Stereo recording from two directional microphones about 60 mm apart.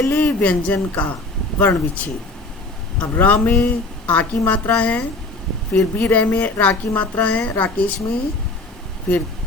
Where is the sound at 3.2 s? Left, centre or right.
Left.